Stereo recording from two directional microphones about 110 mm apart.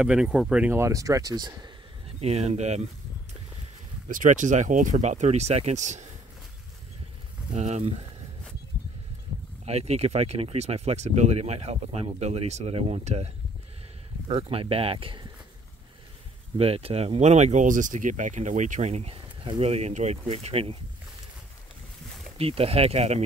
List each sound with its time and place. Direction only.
0.0 s speech: 10° right (ahead or behind)
0.7 s speech: 25° right (ahead or behind)
2.1 s speech: 75° right (ahead or behind)
4.3 s speech: 90° right
7.5 s speech: 90° right
9.7 s speech: 70° right (ahead or behind)
14.3 s speech: 60° right (ahead or behind)
16.5 s speech: 60° right (ahead or behind); by 19.1 s 85° right
19.4 s speech: 55° right (ahead or behind)
22.4 s speech: 65° right (ahead or behind)